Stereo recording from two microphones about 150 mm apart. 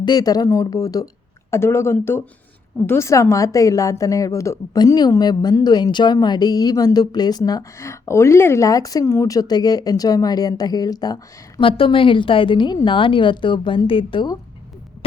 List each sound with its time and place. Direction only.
0.0 s a woman's voice: 25° left (ahead or behind)
11.8 s a woman's voice: 35° left (ahead or behind)